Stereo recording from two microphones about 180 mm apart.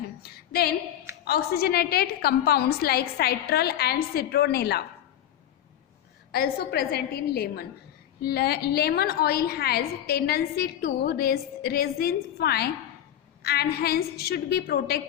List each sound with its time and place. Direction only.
0.2 s a sound: 60° left (ahead or behind)
1.3 s a woman's voice: 60° left (ahead or behind)
6.3 s a woman's voice: 60° left (ahead or behind)